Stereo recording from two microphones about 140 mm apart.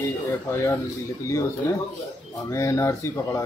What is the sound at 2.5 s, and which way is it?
Speech, 20° left (ahead or behind).